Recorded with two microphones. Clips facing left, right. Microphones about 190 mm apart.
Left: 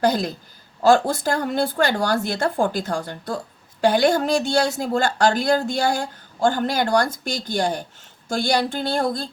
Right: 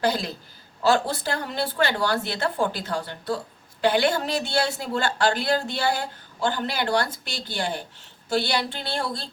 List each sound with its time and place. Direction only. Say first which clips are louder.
0.0 s a woman's voice: left 4 dB; 45° left (ahead or behind)